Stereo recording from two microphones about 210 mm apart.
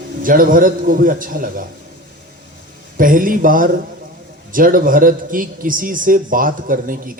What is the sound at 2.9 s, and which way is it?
A man's voice, 40° right (ahead or behind).